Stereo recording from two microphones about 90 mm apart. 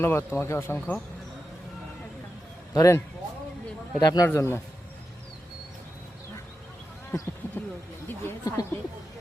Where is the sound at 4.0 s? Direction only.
50° left (ahead or behind).